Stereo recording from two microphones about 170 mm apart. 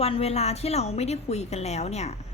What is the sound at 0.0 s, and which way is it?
A woman's voice, 35° left (ahead or behind).